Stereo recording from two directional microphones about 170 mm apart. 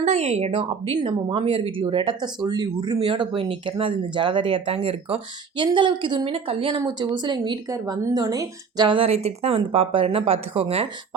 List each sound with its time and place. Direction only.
0.0 s speech: 40° right (ahead or behind)